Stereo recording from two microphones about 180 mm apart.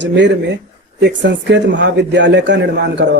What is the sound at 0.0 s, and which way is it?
Speech, 75° right (ahead or behind).